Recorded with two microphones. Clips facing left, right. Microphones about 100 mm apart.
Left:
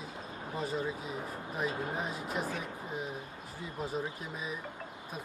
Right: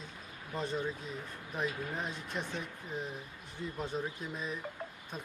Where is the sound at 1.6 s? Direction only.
30° left (ahead or behind).